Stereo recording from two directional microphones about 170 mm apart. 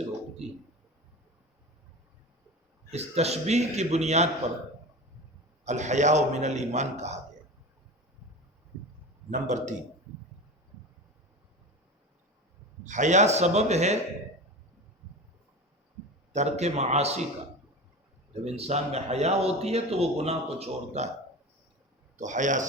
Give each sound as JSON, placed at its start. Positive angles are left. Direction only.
{"t": 0.4, "sound": "speech", "side_deg": -40}
{"t": 2.9, "sound": "speech", "side_deg": -40}
{"t": 5.6, "sound": "a man's voice", "side_deg": -45}
{"t": 9.3, "sound": "a man's voice", "side_deg": -45}
{"t": 12.8, "sound": "speech", "side_deg": -45}
{"t": 16.3, "sound": "speech", "side_deg": -40}
{"t": 18.4, "sound": "speech", "side_deg": -40}
{"t": 22.2, "sound": "a man's voice", "side_deg": -45}